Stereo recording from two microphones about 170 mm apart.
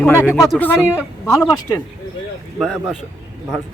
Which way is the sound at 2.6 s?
Centre (ahead or behind).